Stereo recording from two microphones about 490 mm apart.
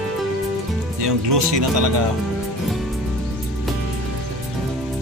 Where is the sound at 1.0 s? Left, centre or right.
Right.